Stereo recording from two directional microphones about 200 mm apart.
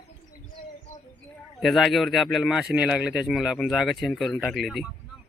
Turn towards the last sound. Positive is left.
turn(degrees=0)  # may be behind; listen again after turning